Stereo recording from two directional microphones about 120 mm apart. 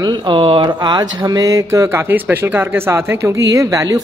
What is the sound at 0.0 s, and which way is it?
Speech, 40° right (ahead or behind).